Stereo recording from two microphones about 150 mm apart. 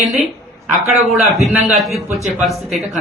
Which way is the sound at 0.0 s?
Centre (ahead or behind).